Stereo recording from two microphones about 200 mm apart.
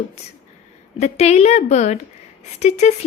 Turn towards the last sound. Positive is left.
turn(degrees=35)  # may be behind; listen again after turning